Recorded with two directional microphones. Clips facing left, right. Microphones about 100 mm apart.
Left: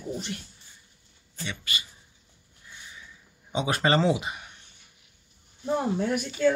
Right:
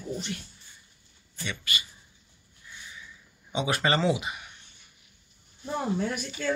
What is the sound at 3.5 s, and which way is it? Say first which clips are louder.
Speech: left 2 dB; 35° left (ahead or behind).